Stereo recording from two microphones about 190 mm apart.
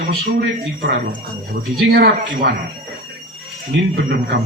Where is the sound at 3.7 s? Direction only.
60° right (ahead or behind).